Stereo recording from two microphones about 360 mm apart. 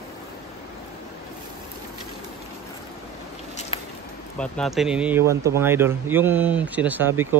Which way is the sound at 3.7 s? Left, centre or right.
Centre.